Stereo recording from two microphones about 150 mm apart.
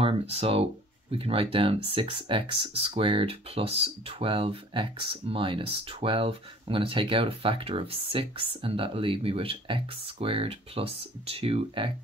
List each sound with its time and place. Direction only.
0.0 s speech: 40° right (ahead or behind)